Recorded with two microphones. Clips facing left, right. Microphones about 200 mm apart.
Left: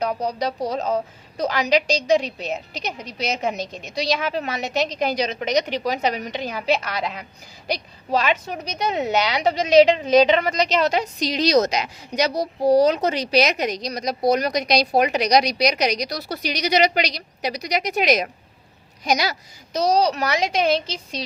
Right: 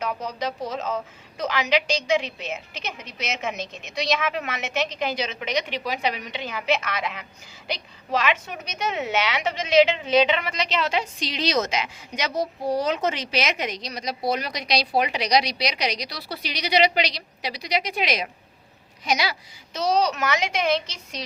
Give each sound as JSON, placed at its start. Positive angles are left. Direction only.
{"t": 0.0, "sound": "a woman's voice", "side_deg": 40}